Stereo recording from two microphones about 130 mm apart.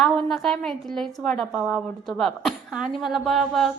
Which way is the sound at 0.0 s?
Centre (ahead or behind).